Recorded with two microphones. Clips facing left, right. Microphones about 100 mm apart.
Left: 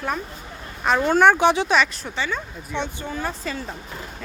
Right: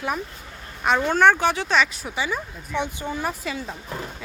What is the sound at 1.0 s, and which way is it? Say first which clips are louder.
Speech: left 3 dB; 10° left (ahead or behind).